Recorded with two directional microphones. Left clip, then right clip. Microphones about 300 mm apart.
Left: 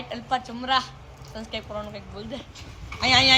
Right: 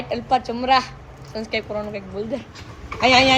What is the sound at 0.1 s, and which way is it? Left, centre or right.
A woman's voice, centre.